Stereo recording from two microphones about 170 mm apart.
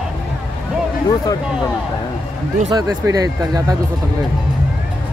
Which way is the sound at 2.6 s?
20° right (ahead or behind).